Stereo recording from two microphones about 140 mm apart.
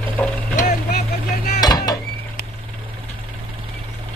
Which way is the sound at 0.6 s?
75° left (ahead or behind).